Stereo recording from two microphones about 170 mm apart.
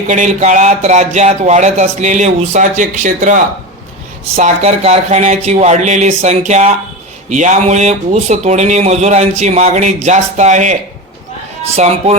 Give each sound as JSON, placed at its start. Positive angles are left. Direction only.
{"t": 0.1, "sound": "speech", "side_deg": -45}
{"t": 4.4, "sound": "speech", "side_deg": -45}